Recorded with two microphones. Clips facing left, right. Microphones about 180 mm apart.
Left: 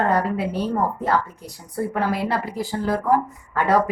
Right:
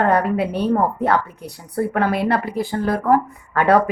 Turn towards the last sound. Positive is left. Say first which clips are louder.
# right 4 dB
turn(degrees=-60)  # may be behind; listen again after turning